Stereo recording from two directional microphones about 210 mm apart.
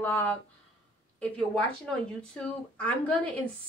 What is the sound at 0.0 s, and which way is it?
Speech, 10° left (ahead or behind).